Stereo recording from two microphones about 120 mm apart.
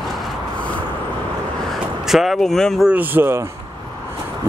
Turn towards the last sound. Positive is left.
turn(degrees=-20)  # may be behind; listen again after turning